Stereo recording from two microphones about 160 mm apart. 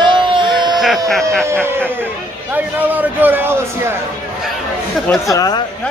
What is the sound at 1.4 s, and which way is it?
A man's voice, 15° right (ahead or behind).